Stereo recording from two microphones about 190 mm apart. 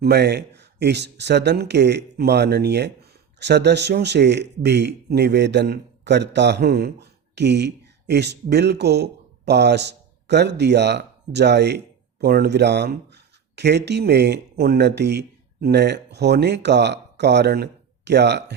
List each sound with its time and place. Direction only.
0.0 s speech: 60° right (ahead or behind)